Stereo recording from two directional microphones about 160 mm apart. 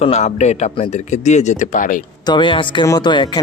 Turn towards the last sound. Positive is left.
turn(degrees=30)  # may be behind; listen again after turning